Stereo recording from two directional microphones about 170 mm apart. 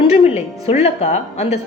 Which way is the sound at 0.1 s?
40° left (ahead or behind).